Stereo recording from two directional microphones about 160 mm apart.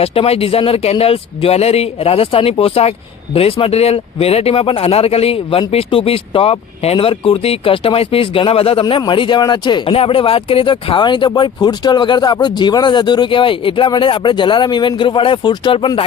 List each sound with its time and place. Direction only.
0.0 s speech: 35° left (ahead or behind)